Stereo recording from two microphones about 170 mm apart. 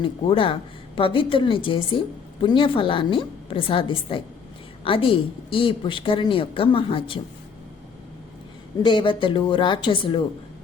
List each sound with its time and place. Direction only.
0.0 s a woman's voice: 30° left (ahead or behind)
8.8 s a woman's voice: 30° left (ahead or behind)